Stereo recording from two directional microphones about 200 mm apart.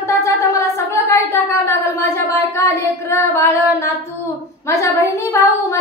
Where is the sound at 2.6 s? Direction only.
15° left (ahead or behind).